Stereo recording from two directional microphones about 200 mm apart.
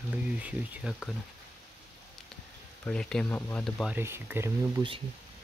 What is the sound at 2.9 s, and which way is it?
Speech, 5° left (ahead or behind).